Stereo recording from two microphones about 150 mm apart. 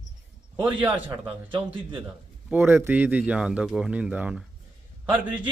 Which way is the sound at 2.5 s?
15° right (ahead or behind).